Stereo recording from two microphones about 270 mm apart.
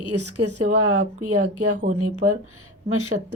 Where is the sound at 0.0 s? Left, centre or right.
Right.